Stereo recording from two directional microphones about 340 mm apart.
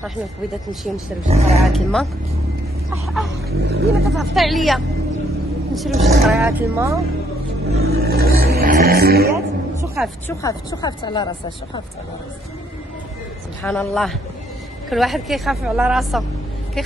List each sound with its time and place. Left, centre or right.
1.3 s speech: centre
1.6 s a woman's voice: centre
3.4 s speech: right
4.2 s a woman's voice: centre
7.7 s speech: right
9.8 s speech: centre
13.6 s a woman's voice: centre